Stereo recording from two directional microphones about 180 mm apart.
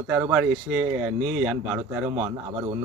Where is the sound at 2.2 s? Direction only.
25° right (ahead or behind).